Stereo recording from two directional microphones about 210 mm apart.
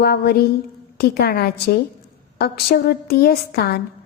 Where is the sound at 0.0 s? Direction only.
50° left (ahead or behind).